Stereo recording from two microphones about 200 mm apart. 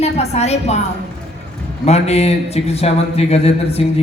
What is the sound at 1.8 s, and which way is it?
Speech, 30° left (ahead or behind).